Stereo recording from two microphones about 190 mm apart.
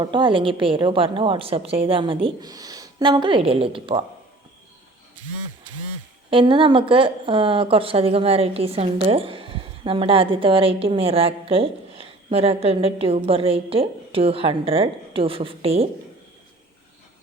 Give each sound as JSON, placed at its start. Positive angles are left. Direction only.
{"t": 0.0, "sound": "a woman's voice", "side_deg": -25}
{"t": 6.3, "sound": "a woman's voice", "side_deg": -25}